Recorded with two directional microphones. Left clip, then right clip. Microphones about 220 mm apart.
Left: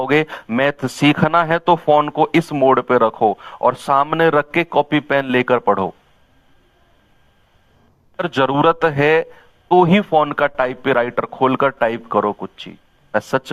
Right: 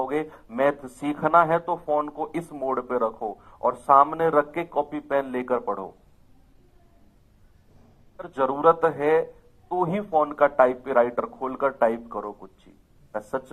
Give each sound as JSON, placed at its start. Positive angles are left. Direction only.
{"t": 0.0, "sound": "a man's voice", "side_deg": 40}
{"t": 8.1, "sound": "a man's voice", "side_deg": 40}